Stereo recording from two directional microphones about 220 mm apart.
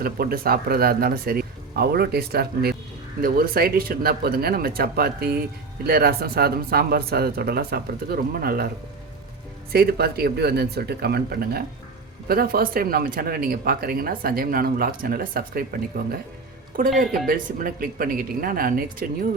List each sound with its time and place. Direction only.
0.0 s speech: 40° right (ahead or behind)
9.7 s speech: 45° right (ahead or behind)